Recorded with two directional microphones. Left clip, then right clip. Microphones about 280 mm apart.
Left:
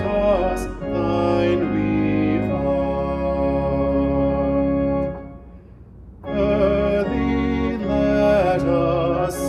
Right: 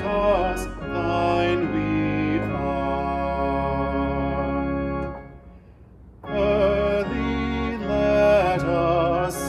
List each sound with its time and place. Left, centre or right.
0.0 s music: centre
6.3 s music: centre